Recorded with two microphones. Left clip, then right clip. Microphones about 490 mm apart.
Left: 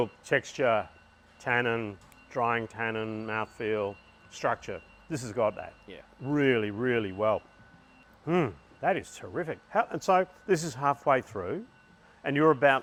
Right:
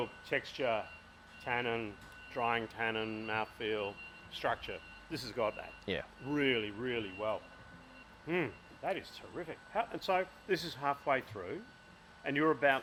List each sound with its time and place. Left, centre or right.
0.0 s a man's voice: left